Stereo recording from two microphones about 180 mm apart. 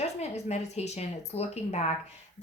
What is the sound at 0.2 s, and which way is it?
Speech, 35° left (ahead or behind).